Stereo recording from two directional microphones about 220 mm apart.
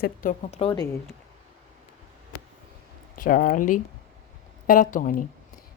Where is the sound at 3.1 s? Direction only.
40° left (ahead or behind).